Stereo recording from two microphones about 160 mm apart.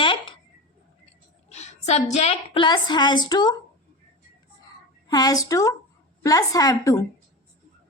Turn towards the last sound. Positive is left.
turn(degrees=20)  # may be behind; listen again after turning